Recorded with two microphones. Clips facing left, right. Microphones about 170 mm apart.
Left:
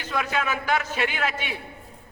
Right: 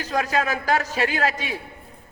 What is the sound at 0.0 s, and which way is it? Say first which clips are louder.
A man's voice: right 4 dB; 35° right (ahead or behind).